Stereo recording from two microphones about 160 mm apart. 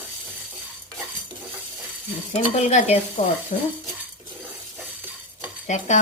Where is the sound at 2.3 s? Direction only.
45° left (ahead or behind).